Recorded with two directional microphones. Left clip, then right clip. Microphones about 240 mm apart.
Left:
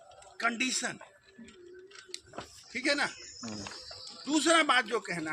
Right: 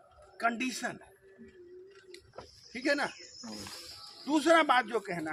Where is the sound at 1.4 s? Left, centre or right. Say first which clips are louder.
Left 1 dB; left.